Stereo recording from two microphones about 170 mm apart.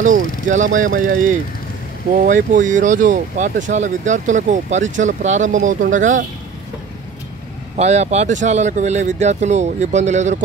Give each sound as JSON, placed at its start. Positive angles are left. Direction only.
{"t": 0.0, "sound": "speech", "side_deg": -45}
{"t": 7.7, "sound": "speech", "side_deg": -40}